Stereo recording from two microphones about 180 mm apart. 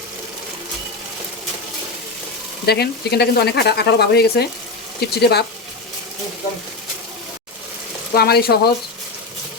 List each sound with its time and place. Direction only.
2.6 s speech: 65° left (ahead or behind)
8.1 s speech: 60° left (ahead or behind)